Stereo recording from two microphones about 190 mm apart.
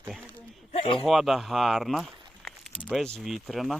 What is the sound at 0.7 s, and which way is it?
Speech, 30° left (ahead or behind).